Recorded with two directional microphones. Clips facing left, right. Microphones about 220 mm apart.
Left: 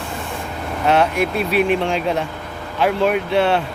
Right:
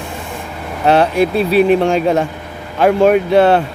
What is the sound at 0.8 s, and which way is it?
Speech, 35° right (ahead or behind).